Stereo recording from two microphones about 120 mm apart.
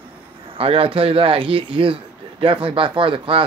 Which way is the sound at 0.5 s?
50° right (ahead or behind).